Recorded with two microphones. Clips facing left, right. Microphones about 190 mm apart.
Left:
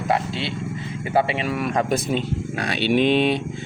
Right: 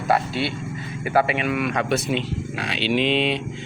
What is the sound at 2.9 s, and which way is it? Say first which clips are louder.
Speech: left 3 dB; 50° left (ahead or behind).